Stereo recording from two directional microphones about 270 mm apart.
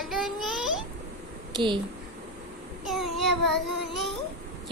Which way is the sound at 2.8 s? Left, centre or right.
Centre.